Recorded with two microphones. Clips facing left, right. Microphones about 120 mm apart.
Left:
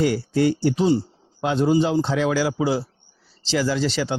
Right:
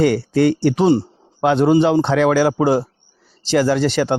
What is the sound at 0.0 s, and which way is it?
A man's voice, 65° right (ahead or behind).